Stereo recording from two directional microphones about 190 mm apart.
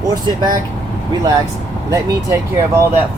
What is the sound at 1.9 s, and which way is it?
Speech, 20° right (ahead or behind).